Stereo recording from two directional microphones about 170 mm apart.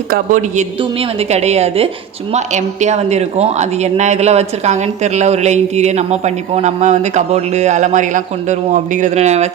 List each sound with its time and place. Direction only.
0.1 s a woman's voice: 50° right (ahead or behind)
0.8 s speech: 35° right (ahead or behind)